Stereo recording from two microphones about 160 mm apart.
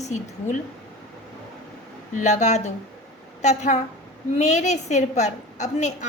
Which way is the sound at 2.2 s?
45° left (ahead or behind).